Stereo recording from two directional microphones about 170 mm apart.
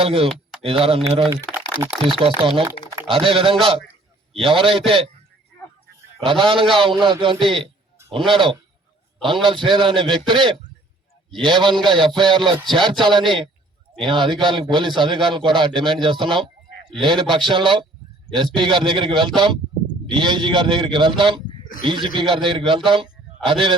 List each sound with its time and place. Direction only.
0.0 s speech: 35° right (ahead or behind)
0.3 s a sound: centre (ahead or behind)
0.6 s speech: 30° right (ahead or behind)
1.7 s speech: 30° left (ahead or behind)
2.1 s speech: 30° right (ahead or behind)
6.1 s a man's voice: 30° right (ahead or behind)